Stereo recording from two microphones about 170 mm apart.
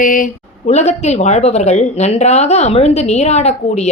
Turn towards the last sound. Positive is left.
turn(degrees=40)  # may be behind; listen again after turning